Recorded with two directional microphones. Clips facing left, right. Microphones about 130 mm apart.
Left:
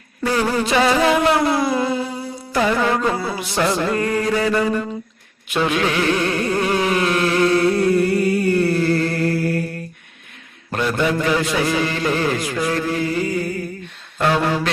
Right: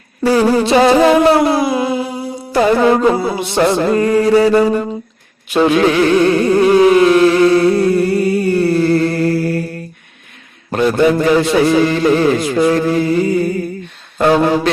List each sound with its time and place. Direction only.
0.2 s a sound: 30° right (ahead or behind)
1.6 s humming: 15° right (ahead or behind)
2.3 s music: 30° right (ahead or behind)
3.3 s a man's voice: 25° right (ahead or behind)
5.5 s music: 30° right (ahead or behind)
10.8 s a man's voice: 35° right (ahead or behind)
14.3 s a sound: 30° right (ahead or behind)